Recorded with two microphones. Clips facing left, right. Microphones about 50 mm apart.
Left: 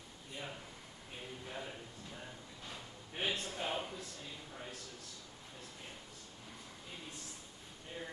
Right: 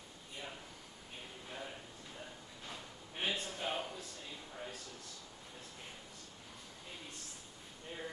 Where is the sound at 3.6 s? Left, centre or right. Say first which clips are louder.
Even; centre.